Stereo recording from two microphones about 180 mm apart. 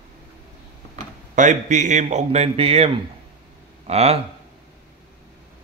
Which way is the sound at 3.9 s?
35° right (ahead or behind).